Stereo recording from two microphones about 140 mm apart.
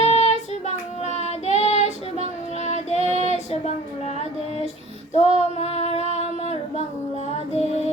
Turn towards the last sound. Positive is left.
turn(degrees=50)  # may be behind; listen again after turning